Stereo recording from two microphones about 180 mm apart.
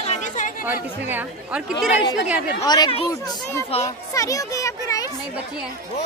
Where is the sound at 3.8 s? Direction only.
20° left (ahead or behind).